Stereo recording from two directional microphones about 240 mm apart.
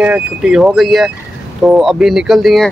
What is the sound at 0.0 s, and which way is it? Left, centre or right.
Speech, centre.